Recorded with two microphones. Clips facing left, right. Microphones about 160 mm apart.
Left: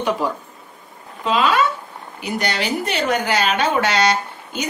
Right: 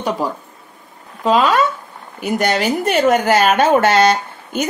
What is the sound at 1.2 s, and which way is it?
Speech, 40° right (ahead or behind).